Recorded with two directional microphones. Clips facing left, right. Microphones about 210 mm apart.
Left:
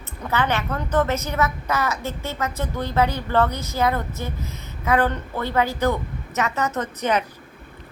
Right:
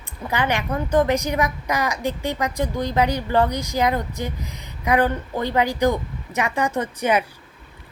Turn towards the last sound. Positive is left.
turn(degrees=-10)  # may be behind; listen again after turning